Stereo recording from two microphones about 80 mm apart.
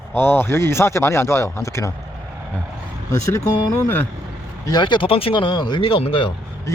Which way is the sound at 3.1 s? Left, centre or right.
Left.